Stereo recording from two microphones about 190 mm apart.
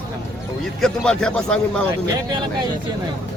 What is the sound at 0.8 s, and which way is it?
A man's voice, 5° left (ahead or behind).